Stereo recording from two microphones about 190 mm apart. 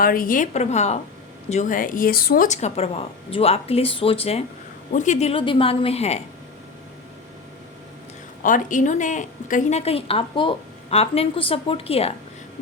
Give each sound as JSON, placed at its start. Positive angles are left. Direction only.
{"t": 0.0, "sound": "a woman's voice", "side_deg": 50}
{"t": 8.4, "sound": "a woman's voice", "side_deg": 45}